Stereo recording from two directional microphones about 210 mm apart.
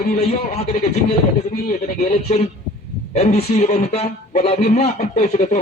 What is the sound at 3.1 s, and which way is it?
A man's voice, 30° left (ahead or behind).